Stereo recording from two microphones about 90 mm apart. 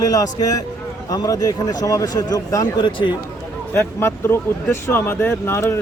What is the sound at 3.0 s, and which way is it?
Speech, 50° left (ahead or behind).